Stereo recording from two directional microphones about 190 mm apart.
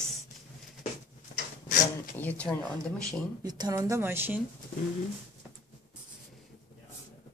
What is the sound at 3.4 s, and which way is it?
A woman's voice, 20° right (ahead or behind).